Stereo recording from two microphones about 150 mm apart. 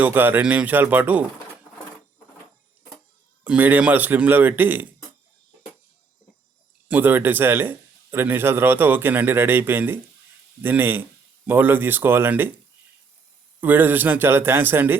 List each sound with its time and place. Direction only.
0.0 s a man's voice: 15° right (ahead or behind)
3.4 s a man's voice: 10° right (ahead or behind)
6.8 s a man's voice: 10° right (ahead or behind)
13.6 s a man's voice: 10° right (ahead or behind)